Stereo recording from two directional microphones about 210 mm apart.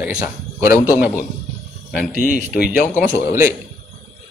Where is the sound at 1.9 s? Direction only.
40° left (ahead or behind).